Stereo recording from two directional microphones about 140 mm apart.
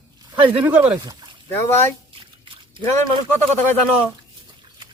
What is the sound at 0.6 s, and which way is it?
Speech, 10° right (ahead or behind).